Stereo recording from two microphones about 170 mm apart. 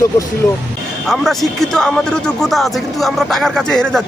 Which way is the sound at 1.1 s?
Centre (ahead or behind).